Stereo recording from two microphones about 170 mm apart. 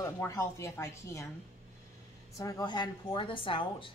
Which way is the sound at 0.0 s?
20° left (ahead or behind).